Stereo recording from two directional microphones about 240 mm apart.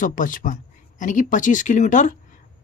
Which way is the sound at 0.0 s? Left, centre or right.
Left.